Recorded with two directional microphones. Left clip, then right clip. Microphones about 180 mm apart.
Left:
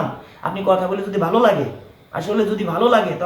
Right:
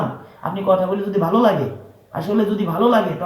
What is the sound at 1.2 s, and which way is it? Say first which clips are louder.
A man's voice: left 1 dB; 15° left (ahead or behind).